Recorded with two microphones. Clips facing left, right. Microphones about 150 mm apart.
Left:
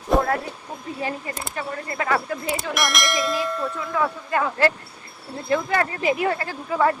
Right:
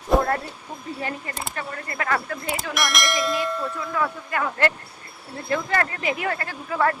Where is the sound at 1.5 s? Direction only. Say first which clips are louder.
Left 4 dB; 10° left (ahead or behind).